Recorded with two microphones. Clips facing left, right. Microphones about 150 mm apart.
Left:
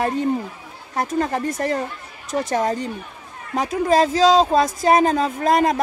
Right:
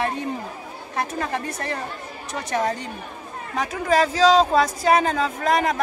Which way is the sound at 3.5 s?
30° left (ahead or behind).